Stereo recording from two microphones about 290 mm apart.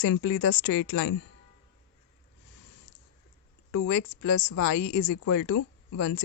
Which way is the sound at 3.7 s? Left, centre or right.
Left.